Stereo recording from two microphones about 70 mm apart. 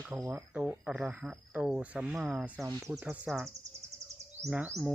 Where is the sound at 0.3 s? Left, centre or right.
Centre.